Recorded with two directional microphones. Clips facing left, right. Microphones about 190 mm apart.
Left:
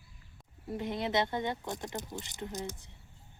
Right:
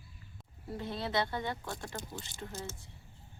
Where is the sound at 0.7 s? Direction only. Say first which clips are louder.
Left 3 dB; 20° left (ahead or behind).